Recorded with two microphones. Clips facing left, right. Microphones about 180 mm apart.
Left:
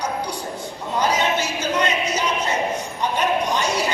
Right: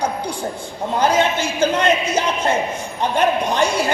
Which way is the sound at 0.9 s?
50° right (ahead or behind).